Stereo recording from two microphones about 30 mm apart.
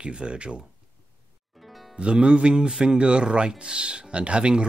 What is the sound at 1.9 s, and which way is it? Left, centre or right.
Speech, right.